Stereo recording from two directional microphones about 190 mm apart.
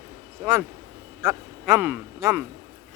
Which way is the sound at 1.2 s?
15° right (ahead or behind).